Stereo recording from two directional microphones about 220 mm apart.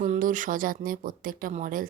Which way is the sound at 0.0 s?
35° right (ahead or behind).